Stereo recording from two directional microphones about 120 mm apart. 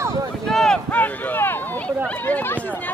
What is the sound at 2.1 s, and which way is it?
Run, 15° left (ahead or behind).